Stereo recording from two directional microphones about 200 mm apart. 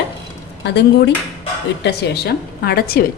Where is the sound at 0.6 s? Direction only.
60° left (ahead or behind).